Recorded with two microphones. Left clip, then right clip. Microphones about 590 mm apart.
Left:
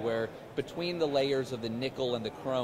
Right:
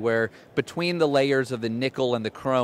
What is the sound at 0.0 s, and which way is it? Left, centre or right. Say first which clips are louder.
Speech: right 8 dB; right.